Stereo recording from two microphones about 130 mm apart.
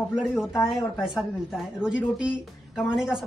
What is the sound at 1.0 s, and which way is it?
Speech, 5° right (ahead or behind).